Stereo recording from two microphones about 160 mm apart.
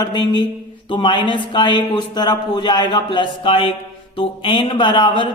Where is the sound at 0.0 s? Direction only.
25° left (ahead or behind).